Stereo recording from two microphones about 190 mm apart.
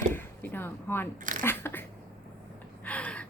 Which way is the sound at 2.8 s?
5° left (ahead or behind).